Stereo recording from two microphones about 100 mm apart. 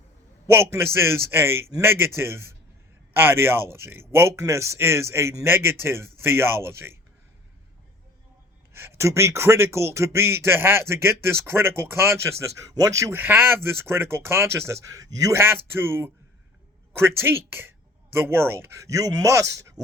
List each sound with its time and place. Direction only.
0.4 s speech: 25° right (ahead or behind)
8.7 s speech: 25° right (ahead or behind)
13.1 s speech: 20° right (ahead or behind)